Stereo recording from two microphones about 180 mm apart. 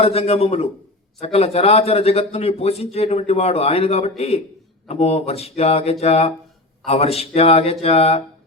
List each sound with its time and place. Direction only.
0.0 s a man's voice: 35° left (ahead or behind)